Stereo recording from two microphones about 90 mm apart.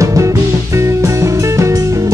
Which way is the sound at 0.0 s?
35° right (ahead or behind).